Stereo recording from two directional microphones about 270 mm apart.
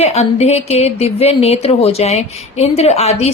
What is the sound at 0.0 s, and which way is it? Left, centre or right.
Speech, left.